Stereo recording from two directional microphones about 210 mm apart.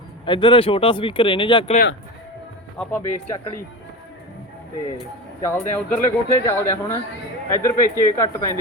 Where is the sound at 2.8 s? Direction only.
10° left (ahead or behind).